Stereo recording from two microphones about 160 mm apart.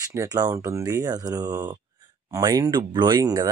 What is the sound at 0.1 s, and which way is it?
Speech, 20° right (ahead or behind).